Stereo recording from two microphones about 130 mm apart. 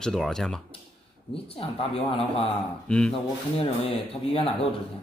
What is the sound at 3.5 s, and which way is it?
Speech, 45° left (ahead or behind).